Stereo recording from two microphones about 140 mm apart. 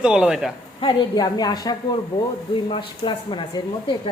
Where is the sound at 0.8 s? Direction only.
30° left (ahead or behind).